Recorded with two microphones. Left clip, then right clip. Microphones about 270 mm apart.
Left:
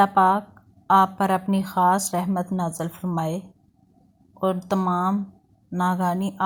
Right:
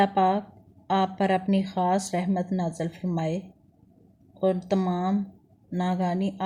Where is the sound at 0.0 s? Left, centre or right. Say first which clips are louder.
Left 5 dB; centre.